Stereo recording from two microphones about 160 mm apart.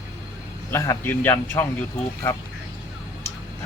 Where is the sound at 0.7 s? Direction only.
15° left (ahead or behind).